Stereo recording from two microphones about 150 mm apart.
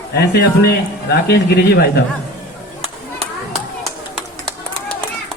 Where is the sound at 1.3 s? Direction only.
90° left.